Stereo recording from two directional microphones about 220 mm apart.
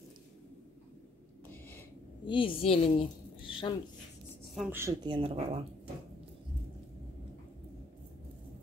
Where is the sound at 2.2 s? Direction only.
25° left (ahead or behind).